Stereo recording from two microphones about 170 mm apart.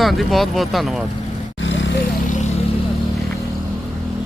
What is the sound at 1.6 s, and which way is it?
Vehicle, 90° left.